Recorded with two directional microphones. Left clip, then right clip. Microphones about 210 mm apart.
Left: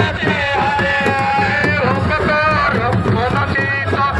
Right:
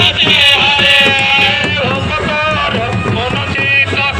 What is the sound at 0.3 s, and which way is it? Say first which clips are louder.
Music: right 6 dB; 90° left.